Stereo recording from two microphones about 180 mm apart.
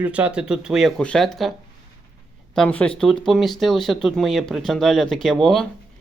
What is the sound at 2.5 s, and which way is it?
A man's voice, 5° left (ahead or behind).